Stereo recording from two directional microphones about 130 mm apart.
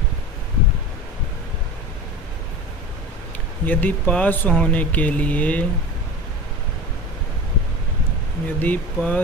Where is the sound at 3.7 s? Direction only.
15° left (ahead or behind).